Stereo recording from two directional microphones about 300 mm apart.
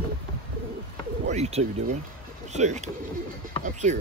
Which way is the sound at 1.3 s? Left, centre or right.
Right.